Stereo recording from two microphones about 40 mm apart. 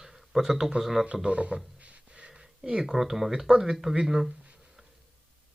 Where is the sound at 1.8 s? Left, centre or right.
Right.